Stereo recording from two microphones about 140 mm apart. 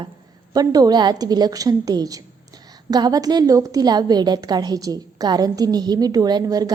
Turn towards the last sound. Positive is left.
turn(degrees=-25)  # may be behind; listen again after turning